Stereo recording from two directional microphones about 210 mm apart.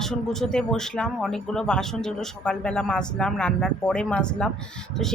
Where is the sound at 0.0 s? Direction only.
Centre (ahead or behind).